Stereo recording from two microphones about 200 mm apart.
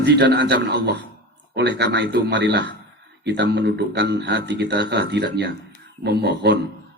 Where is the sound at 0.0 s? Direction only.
60° right (ahead or behind).